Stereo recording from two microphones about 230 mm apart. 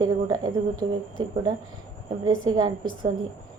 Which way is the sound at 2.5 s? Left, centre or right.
Right.